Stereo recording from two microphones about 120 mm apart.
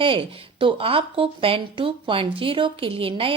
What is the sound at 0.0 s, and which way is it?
A woman's voice, 45° right (ahead or behind).